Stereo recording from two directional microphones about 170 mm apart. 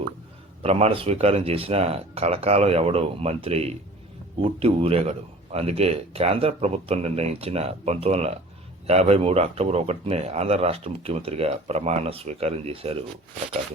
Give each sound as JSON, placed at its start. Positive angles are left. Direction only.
{"t": 0.6, "sound": "speech", "side_deg": -35}